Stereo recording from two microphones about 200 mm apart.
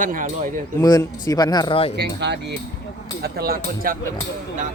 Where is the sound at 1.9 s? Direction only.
60° right (ahead or behind).